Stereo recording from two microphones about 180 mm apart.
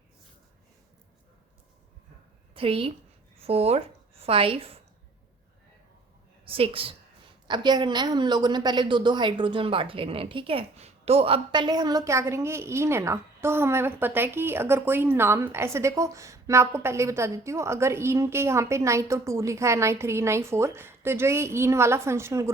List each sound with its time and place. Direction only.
2.6 s a woman's voice: 30° right (ahead or behind)
6.4 s a woman's voice: 30° right (ahead or behind); by 22.5 s 15° right (ahead or behind)